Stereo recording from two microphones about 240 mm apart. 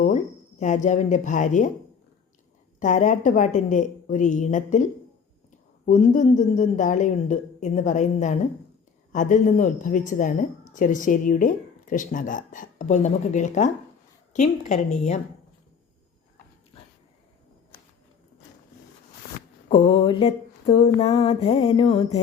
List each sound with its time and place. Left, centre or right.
0.6 s a woman's voice: left
2.8 s a woman's voice: left
5.8 s mantra: left
9.1 s a woman's voice: left
14.3 s mantra: left
19.6 s mantra: left